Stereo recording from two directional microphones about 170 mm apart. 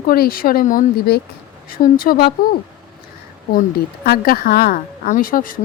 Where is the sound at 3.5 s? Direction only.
60° left (ahead or behind).